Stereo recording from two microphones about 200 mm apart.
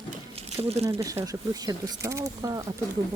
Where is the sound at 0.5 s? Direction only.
30° right (ahead or behind).